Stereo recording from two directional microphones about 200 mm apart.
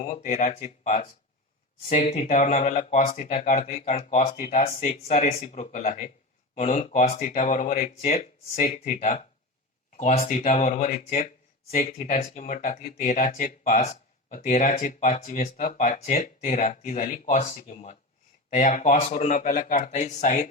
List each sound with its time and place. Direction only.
0.0 s speech: 40° left (ahead or behind)
7.2 s speech: 40° left (ahead or behind)